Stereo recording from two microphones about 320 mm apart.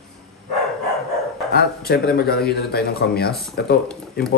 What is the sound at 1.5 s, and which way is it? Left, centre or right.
Speech, left.